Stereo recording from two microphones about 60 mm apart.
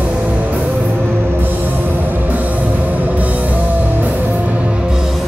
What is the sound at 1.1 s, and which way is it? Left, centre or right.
Music, right.